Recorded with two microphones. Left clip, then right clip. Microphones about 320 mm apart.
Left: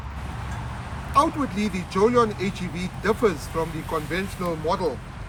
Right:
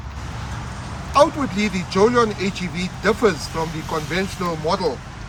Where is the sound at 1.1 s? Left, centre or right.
Right.